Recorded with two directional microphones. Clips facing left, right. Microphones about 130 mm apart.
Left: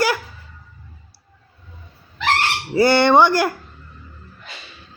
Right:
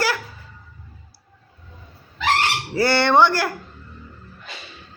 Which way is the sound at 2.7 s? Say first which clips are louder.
Left 4 dB; 15° left (ahead or behind).